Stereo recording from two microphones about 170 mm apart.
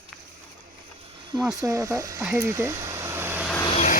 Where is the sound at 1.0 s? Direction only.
30° right (ahead or behind).